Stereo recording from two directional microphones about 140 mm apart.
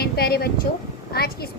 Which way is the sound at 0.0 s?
90° left.